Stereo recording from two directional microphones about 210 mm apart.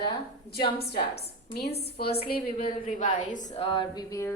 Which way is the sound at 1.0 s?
50° left (ahead or behind).